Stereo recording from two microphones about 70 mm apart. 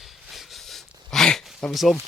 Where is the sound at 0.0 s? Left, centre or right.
Centre.